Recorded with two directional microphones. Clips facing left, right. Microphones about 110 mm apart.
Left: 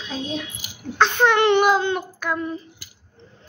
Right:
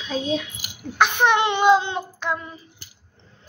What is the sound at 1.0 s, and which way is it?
Speech, 15° right (ahead or behind).